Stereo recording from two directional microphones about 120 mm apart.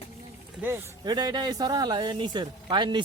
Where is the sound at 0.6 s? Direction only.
20° right (ahead or behind).